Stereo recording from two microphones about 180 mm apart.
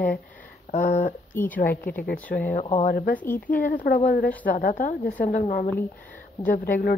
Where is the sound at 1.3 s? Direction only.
10° left (ahead or behind).